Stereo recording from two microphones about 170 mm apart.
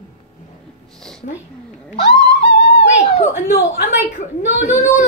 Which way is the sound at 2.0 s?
80° left.